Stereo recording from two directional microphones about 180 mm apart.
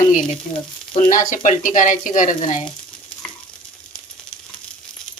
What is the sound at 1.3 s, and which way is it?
Sizzle, 45° left (ahead or behind).